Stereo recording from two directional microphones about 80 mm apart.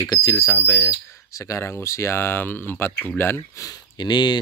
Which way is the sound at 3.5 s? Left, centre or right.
Left.